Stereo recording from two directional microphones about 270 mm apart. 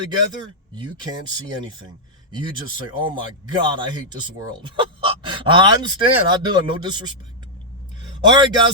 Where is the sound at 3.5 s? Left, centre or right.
Centre.